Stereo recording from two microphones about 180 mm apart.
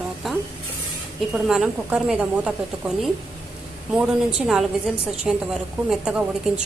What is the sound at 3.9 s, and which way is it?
A woman's voice, 5° right (ahead or behind).